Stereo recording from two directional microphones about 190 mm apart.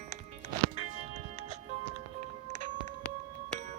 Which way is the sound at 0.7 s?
30° right (ahead or behind).